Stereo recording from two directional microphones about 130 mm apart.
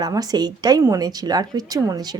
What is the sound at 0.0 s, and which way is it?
Speech, 30° right (ahead or behind).